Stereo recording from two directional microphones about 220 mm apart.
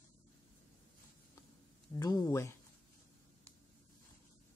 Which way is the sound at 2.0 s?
15° left (ahead or behind).